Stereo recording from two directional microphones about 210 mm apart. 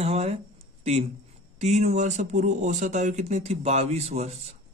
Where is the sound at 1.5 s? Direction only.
35° right (ahead or behind).